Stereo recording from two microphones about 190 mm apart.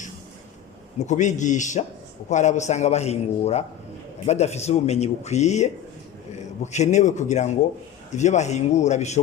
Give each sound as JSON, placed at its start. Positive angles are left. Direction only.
{"t": 0.9, "sound": "speech", "side_deg": 40}